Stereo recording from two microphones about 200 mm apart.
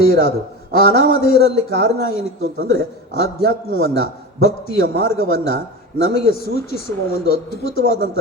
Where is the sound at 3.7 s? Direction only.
50° left (ahead or behind).